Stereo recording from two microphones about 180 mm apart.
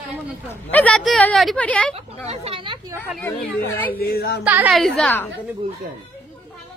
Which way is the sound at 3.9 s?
60° left (ahead or behind).